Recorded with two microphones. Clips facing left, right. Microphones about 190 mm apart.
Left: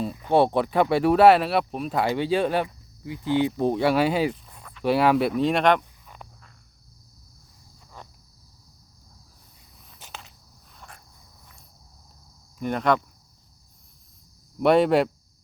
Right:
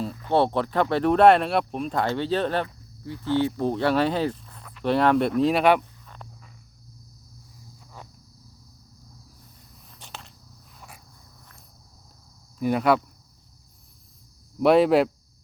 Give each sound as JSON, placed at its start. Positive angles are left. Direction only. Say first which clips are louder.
{"t": 0.0, "sound": "speech", "louder": "left 2 dB", "side_deg": 15}
{"t": 8.0, "sound": "a sound", "louder": "even", "side_deg": -10}
{"t": 9.8, "sound": "walk", "louder": "even", "side_deg": 0}
{"t": 10.8, "sound": "a sound", "louder": "even", "side_deg": -5}
{"t": 12.5, "sound": "speech", "louder": "right 2 dB", "side_deg": -5}
{"t": 14.6, "sound": "speech", "louder": "right 1 dB", "side_deg": 0}